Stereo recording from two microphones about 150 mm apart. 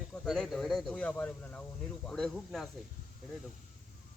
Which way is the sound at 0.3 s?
Centre (ahead or behind).